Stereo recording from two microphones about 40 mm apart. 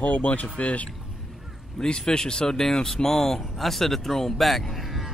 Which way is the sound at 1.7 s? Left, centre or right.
Centre.